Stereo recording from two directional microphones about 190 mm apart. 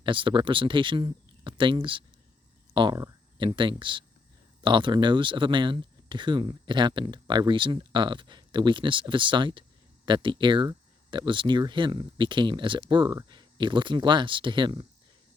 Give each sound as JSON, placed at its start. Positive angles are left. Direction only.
{"t": 0.0, "sound": "speech", "side_deg": -25}